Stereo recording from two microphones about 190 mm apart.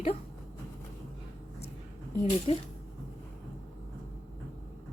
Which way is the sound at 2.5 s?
30° left (ahead or behind).